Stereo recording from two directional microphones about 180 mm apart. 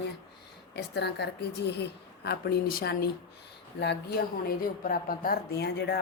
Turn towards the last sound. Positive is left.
turn(degrees=65)  # may be behind; listen again after turning